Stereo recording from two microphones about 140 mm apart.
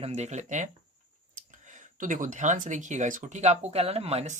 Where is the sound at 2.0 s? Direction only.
65° right (ahead or behind).